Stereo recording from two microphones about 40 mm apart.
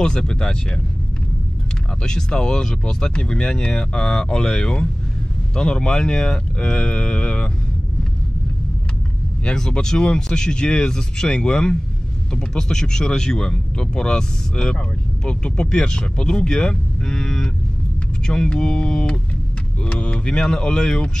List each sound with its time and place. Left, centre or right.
0.0 s speech: centre
2.0 s speech: centre
9.4 s speech: left